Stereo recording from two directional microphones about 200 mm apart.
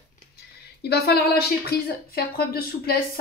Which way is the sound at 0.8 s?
55° left (ahead or behind).